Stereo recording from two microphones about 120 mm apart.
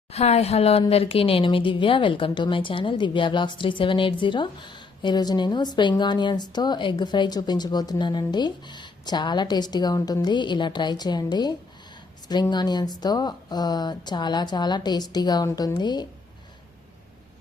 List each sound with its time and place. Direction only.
0.1 s speech: 60° left (ahead or behind); by 16.0 s 35° left (ahead or behind)